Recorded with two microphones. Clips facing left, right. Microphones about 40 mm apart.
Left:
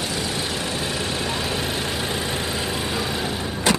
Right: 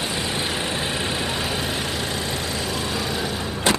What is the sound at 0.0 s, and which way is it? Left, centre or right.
Vehicle, right.